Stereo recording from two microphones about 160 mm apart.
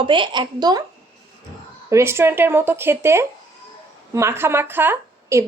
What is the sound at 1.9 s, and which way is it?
A woman's voice, 15° right (ahead or behind).